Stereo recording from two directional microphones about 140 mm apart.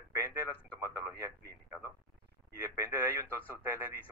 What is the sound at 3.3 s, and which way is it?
Speech, 15° right (ahead or behind).